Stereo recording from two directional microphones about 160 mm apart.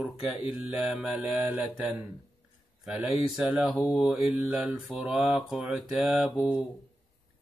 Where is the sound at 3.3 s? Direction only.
Centre (ahead or behind).